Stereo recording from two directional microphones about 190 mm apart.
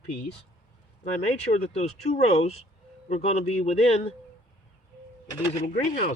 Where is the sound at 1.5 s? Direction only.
35° left (ahead or behind).